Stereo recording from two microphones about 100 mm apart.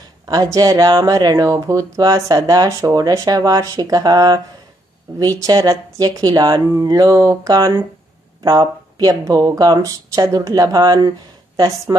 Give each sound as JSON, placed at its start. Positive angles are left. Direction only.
{"t": 0.3, "sound": "speech", "side_deg": -40}